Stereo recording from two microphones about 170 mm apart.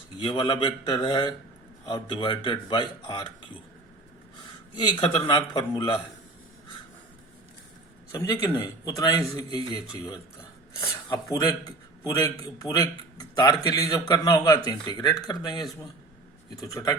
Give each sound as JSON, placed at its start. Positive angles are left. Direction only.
{"t": 0.2, "sound": "a man's voice", "side_deg": 30}
{"t": 4.9, "sound": "a man's voice", "side_deg": 30}
{"t": 8.1, "sound": "a man's voice", "side_deg": 20}